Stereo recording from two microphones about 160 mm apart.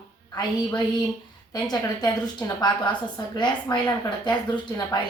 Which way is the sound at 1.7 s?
25° left (ahead or behind).